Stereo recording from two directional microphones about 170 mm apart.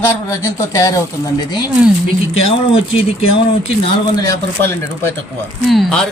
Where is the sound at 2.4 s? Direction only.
35° left (ahead or behind).